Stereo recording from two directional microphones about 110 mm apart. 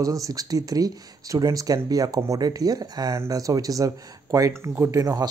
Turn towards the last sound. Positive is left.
turn(degrees=-35)  # may be behind; listen again after turning